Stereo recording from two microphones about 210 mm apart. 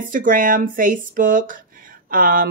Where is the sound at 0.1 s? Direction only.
40° right (ahead or behind).